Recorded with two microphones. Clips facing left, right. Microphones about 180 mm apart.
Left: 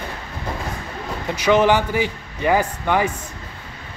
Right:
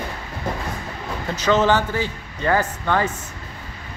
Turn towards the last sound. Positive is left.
turn(degrees=10)  # may be behind; listen again after turning